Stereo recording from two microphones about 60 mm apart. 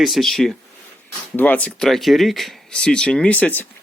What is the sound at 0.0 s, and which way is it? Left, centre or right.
Speech, centre.